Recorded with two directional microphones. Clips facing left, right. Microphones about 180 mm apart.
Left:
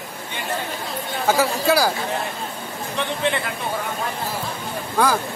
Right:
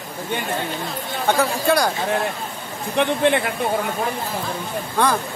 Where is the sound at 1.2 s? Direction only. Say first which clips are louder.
Even; 5° left (ahead or behind).